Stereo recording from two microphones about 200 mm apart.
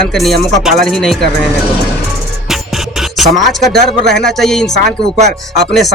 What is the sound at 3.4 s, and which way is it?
Speech, centre (ahead or behind).